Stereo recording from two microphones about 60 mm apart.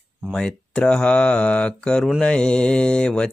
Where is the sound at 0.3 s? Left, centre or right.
Centre.